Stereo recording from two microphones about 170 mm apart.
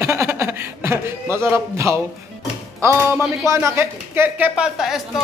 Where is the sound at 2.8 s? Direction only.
15° right (ahead or behind).